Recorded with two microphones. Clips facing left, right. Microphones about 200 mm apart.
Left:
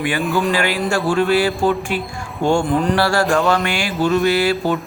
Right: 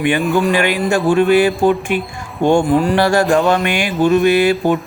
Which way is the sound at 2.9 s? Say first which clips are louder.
Right 2 dB; 20° right (ahead or behind).